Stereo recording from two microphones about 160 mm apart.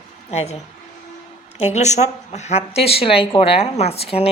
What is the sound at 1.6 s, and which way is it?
Speech, 45° left (ahead or behind).